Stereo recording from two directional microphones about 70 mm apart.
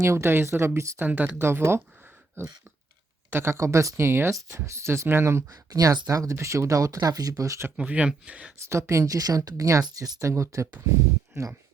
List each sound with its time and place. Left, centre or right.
0.0 s speech: right
0.9 s speech: right
1.4 s speech: right
5.5 s speech: right
7.8 s speech: centre
8.5 s speech: right
9.8 s speech: right